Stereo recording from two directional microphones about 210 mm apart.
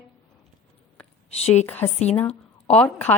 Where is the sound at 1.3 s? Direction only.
30° left (ahead or behind).